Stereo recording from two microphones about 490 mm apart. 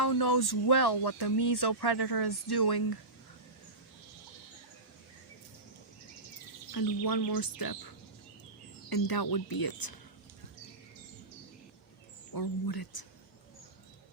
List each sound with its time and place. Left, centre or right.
0.0 s speech: left
6.7 s speech: left
12.3 s speech: left